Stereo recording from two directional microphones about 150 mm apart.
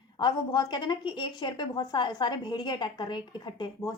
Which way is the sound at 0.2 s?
30° left (ahead or behind).